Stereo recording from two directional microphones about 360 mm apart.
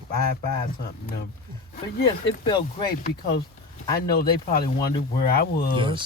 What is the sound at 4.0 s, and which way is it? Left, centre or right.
Speech, left.